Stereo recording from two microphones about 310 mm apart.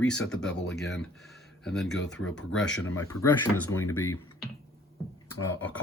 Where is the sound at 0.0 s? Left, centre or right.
Centre.